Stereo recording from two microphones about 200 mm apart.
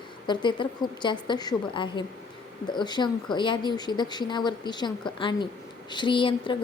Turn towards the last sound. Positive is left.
turn(degrees=25)  # may be behind; listen again after turning